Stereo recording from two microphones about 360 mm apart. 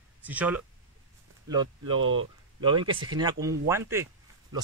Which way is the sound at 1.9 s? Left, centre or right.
Right.